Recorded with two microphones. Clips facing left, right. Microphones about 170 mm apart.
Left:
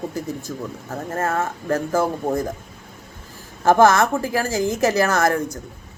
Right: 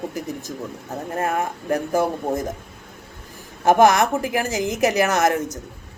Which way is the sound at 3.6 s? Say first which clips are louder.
Even; 15° right (ahead or behind).